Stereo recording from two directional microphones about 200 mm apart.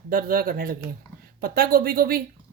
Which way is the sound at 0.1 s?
45° right (ahead or behind).